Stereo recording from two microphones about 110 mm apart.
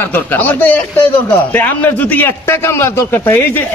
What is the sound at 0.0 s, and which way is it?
A man's voice, 15° left (ahead or behind).